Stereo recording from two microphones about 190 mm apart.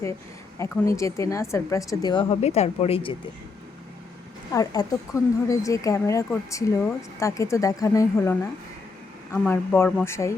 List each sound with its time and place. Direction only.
0.6 s a woman's voice: 15° left (ahead or behind)
4.5 s a woman's voice: 20° left (ahead or behind)